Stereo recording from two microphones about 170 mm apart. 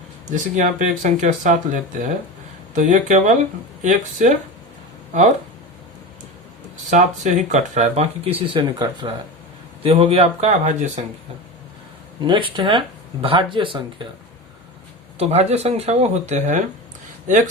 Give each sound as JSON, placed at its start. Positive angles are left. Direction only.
{"t": 0.3, "sound": "speech", "side_deg": -45}
{"t": 6.9, "sound": "speech", "side_deg": -45}
{"t": 8.5, "sound": "speech", "side_deg": -30}
{"t": 12.2, "sound": "speech", "side_deg": -25}
{"t": 15.2, "sound": "speech", "side_deg": -40}